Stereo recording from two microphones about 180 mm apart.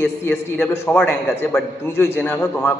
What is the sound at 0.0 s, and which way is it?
A man's voice, 10° left (ahead or behind).